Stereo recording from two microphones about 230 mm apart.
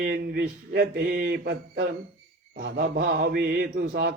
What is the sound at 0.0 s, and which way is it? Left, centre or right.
Mantra, right.